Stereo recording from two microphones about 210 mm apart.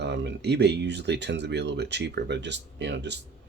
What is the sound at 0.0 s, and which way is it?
Speech, 55° right (ahead or behind).